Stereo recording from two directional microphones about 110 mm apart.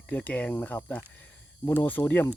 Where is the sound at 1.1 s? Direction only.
15° left (ahead or behind).